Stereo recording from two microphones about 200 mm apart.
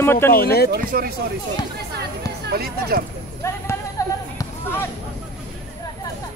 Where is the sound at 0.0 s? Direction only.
10° left (ahead or behind).